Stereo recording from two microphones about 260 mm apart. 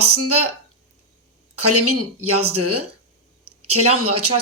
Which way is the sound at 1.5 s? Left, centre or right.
Right.